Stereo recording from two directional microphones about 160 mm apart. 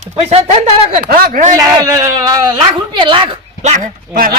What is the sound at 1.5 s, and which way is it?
Speech, 20° right (ahead or behind).